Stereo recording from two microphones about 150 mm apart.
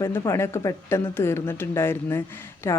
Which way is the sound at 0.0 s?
15° left (ahead or behind).